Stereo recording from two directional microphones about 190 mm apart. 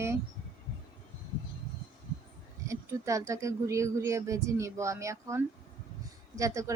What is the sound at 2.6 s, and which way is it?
Speech, 15° right (ahead or behind).